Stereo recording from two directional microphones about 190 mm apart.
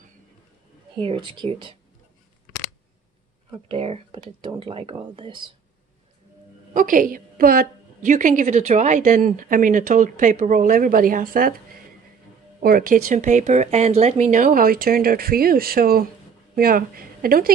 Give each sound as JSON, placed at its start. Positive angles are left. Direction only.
{"t": 0.9, "sound": "speech", "side_deg": -25}
{"t": 3.6, "sound": "speech", "side_deg": -30}
{"t": 6.7, "sound": "a woman's voice", "side_deg": -45}
{"t": 12.5, "sound": "a woman's voice", "side_deg": -50}